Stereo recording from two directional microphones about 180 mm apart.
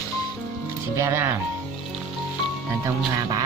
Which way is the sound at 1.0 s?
15° right (ahead or behind).